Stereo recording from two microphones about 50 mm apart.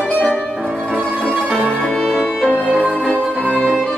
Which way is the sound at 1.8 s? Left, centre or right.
Centre.